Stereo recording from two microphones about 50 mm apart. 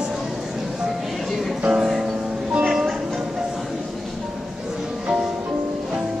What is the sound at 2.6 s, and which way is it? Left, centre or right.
Music, centre.